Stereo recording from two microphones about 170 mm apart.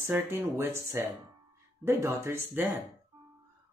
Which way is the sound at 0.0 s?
15° right (ahead or behind).